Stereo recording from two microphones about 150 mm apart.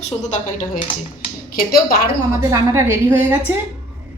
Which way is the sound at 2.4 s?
20° right (ahead or behind).